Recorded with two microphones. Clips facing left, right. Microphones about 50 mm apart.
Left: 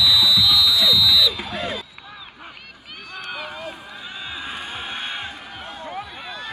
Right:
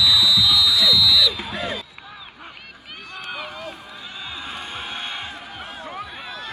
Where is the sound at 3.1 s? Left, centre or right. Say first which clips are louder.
Left 1 dB; centre.